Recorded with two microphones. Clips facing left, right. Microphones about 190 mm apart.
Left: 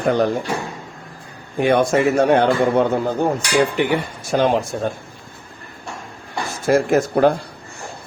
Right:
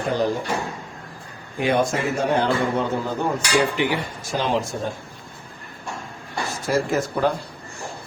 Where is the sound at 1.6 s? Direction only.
60° left (ahead or behind).